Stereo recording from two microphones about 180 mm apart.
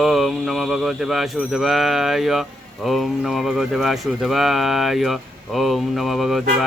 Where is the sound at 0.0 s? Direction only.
Centre (ahead or behind).